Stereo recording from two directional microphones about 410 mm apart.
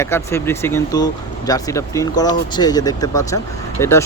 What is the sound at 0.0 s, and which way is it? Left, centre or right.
Speech, centre.